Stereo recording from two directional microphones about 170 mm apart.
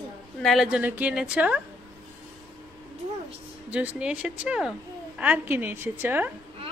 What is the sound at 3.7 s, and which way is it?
A woman's voice, 10° right (ahead or behind).